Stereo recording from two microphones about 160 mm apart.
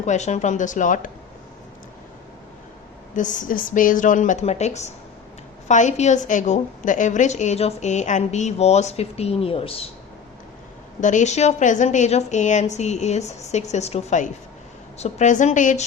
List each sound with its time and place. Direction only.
0.0 s a woman's voice: 45° left (ahead or behind)
3.2 s a woman's voice: 50° left (ahead or behind); by 9.8 s 35° left (ahead or behind)
11.0 s a woman's voice: 50° left (ahead or behind)